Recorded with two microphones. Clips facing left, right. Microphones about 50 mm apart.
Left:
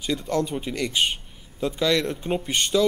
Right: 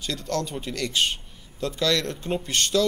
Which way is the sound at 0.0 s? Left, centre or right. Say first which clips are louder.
Left 3 dB; centre.